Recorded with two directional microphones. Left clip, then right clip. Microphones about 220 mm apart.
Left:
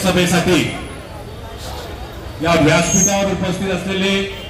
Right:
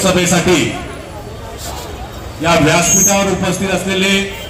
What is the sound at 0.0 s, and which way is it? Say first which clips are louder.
Speech: right 3 dB; centre (ahead or behind).